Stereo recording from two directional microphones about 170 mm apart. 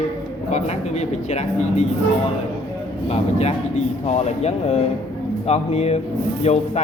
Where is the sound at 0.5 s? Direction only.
40° left (ahead or behind).